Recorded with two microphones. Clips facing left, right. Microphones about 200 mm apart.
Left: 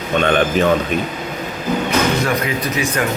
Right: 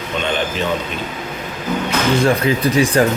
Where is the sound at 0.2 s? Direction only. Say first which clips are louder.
Left 5 dB; 55° left (ahead or behind).